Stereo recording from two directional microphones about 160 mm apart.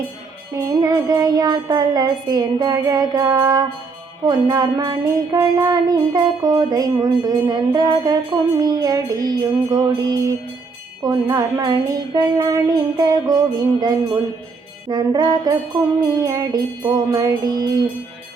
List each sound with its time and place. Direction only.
0.5 s music: 20° right (ahead or behind)
14.8 s music: 25° right (ahead or behind)
15.7 s music: 15° right (ahead or behind)